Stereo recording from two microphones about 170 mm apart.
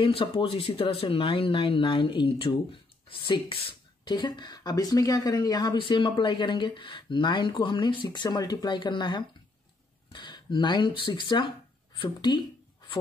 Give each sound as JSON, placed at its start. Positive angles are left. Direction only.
{"t": 0.0, "sound": "speech", "side_deg": 30}